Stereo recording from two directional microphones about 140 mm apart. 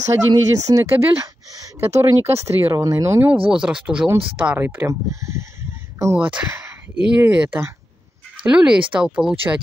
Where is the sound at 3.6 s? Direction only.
5° right (ahead or behind).